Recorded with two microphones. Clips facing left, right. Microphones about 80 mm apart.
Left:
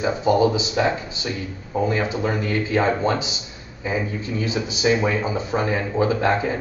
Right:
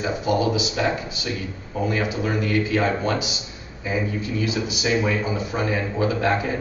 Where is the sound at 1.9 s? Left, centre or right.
Left.